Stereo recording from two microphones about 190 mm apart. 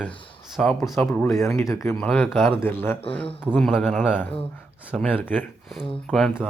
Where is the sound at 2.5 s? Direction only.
10° left (ahead or behind).